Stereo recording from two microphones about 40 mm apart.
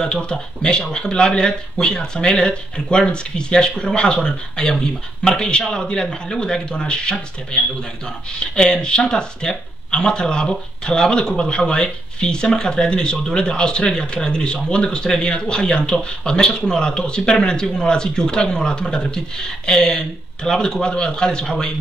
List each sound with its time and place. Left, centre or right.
0.0 s speech: left